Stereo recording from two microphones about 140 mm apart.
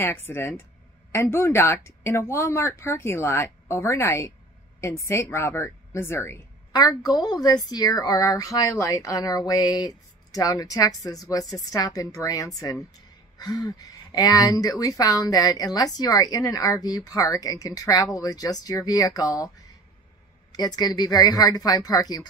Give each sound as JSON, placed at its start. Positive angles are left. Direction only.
{"t": 0.0, "sound": "a woman's voice", "side_deg": 15}
{"t": 6.7, "sound": "a woman's voice", "side_deg": 30}
{"t": 20.5, "sound": "a woman's voice", "side_deg": 30}